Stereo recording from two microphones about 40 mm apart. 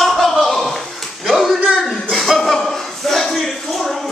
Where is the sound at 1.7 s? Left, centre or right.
Centre.